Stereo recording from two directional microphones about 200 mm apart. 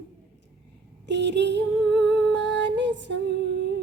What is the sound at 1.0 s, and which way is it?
Female singing, 60° right (ahead or behind).